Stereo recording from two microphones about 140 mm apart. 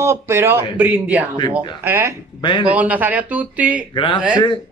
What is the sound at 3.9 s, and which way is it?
Speech, 35° left (ahead or behind).